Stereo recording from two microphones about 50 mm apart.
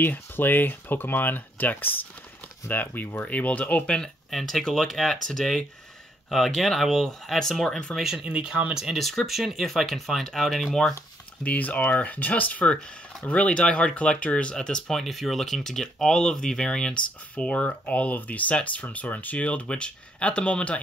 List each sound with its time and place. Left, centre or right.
0.0 s speech: left
4.0 s speech: centre
7.9 s speech: centre
8.2 s speech: centre
9.2 s speech: centre
11.4 s speech: left